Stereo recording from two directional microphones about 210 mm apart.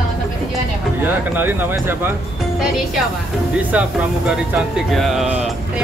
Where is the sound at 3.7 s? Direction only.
5° right (ahead or behind).